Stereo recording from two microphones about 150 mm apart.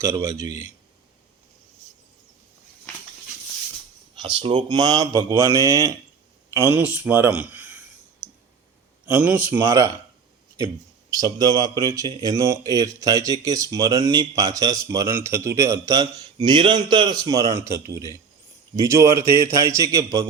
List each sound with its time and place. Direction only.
0.0 s speech: 20° right (ahead or behind)
4.4 s speech: 35° right (ahead or behind); by 7.8 s 10° right (ahead or behind)
9.0 s a man's voice: 10° right (ahead or behind)
11.1 s speech: 25° right (ahead or behind)